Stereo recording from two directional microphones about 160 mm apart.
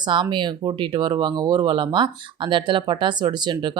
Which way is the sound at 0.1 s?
30° right (ahead or behind).